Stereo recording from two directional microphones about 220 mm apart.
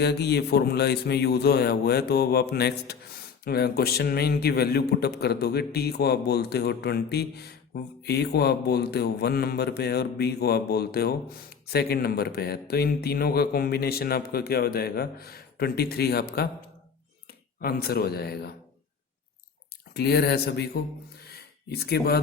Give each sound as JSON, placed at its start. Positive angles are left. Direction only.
{"t": 0.0, "sound": "a man's voice", "side_deg": 50}
{"t": 17.6, "sound": "a man's voice", "side_deg": 45}
{"t": 19.9, "sound": "a man's voice", "side_deg": 45}
{"t": 21.7, "sound": "a man's voice", "side_deg": 45}